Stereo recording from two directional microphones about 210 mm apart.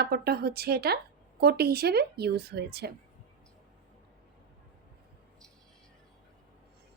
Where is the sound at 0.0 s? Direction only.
50° right (ahead or behind).